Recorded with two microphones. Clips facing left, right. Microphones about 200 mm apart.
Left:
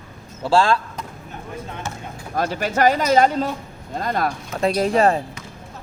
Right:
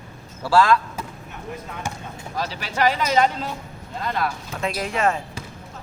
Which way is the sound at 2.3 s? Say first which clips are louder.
Left 6 dB; 50° left (ahead or behind).